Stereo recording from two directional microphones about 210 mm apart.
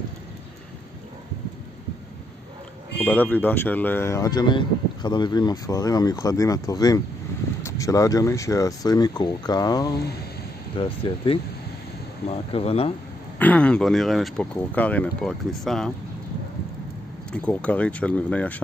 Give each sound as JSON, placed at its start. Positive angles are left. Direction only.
{"t": 3.0, "sound": "speech", "side_deg": 10}
{"t": 13.4, "sound": "speech", "side_deg": 5}
{"t": 17.3, "sound": "speech", "side_deg": 5}